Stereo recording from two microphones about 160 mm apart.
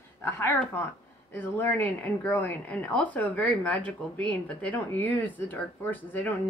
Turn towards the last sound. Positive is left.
turn(degrees=10)  # may be behind; listen again after turning